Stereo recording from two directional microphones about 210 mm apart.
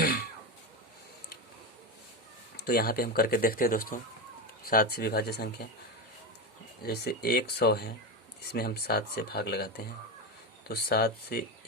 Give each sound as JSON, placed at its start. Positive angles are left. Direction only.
{"t": 0.0, "sound": "a sound", "side_deg": 45}
{"t": 2.6, "sound": "speech", "side_deg": 50}
{"t": 6.8, "sound": "speech", "side_deg": 50}